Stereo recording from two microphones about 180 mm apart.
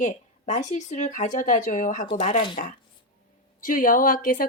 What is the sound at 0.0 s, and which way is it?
Speech, 45° left (ahead or behind).